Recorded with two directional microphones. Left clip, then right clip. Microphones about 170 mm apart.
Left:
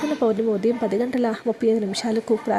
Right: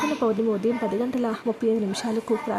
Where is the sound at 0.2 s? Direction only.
10° left (ahead or behind).